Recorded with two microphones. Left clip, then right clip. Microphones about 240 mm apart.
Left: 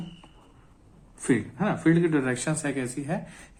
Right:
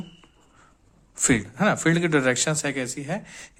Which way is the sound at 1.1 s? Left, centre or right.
Right.